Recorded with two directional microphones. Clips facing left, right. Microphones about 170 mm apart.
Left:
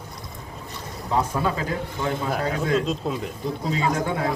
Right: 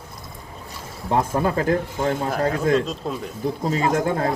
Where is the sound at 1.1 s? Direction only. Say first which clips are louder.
Right 3 dB; 45° right (ahead or behind).